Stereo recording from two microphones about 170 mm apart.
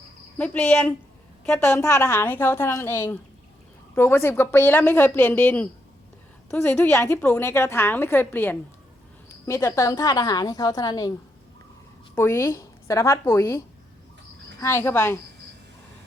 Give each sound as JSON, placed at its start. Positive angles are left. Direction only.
{"t": 0.3, "sound": "a woman's voice", "side_deg": 10}
{"t": 12.1, "sound": "a woman's voice", "side_deg": 15}
{"t": 14.6, "sound": "a woman's voice", "side_deg": 15}